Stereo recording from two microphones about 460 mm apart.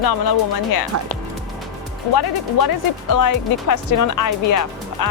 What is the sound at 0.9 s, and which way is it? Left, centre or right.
Speech, right.